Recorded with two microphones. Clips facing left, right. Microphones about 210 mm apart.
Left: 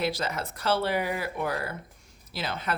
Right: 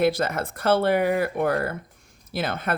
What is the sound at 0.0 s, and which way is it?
Speech, 55° right (ahead or behind).